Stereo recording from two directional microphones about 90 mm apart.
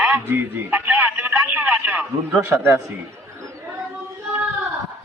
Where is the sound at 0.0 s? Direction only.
20° right (ahead or behind).